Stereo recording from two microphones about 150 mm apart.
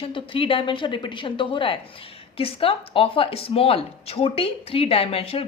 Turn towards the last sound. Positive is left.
turn(degrees=40)  # may be behind; listen again after turning